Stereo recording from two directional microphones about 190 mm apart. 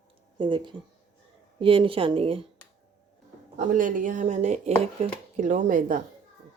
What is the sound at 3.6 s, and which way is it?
Speech, 40° right (ahead or behind).